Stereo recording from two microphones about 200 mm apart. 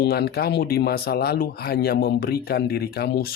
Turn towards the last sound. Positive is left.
turn(degrees=50)  # may be behind; listen again after turning